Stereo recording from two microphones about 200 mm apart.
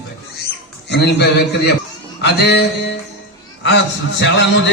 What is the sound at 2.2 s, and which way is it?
Speech, 55° left (ahead or behind).